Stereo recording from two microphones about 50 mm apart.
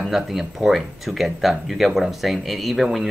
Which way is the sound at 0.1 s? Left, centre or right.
Centre.